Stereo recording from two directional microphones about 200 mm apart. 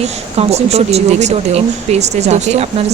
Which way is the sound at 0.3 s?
30° right (ahead or behind).